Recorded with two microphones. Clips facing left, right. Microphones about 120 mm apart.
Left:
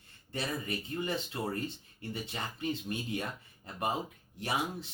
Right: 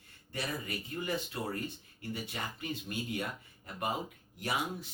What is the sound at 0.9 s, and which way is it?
Speech, 25° left (ahead or behind).